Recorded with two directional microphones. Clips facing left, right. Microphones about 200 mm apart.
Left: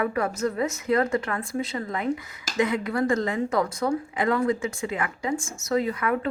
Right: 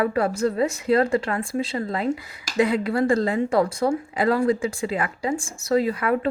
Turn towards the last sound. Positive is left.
turn(degrees=-30)  # may be behind; listen again after turning